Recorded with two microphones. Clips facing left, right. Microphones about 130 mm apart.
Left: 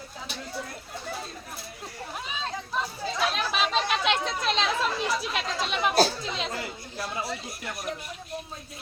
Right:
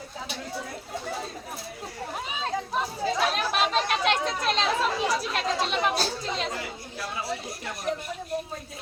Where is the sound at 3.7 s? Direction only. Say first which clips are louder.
Right 1 dB; centre (ahead or behind).